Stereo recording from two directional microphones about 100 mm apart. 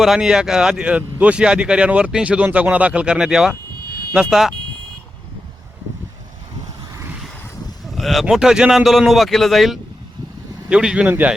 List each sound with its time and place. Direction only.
0.0 s a man's voice: 5° right (ahead or behind)
7.9 s a man's voice: centre (ahead or behind)
10.7 s speech: 10° right (ahead or behind)